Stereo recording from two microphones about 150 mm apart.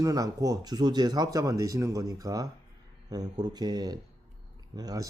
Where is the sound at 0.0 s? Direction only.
25° right (ahead or behind).